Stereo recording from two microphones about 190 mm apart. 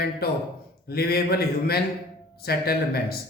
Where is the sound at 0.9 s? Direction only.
55° left (ahead or behind).